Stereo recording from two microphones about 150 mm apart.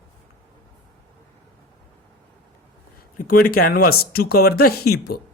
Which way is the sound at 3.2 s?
70° left (ahead or behind).